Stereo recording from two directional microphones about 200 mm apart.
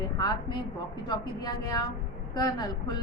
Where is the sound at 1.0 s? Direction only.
20° left (ahead or behind).